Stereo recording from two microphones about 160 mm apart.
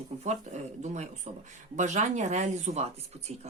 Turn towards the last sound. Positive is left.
turn(degrees=-40)  # may be behind; listen again after turning